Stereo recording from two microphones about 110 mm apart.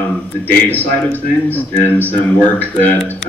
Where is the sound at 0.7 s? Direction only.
15° left (ahead or behind).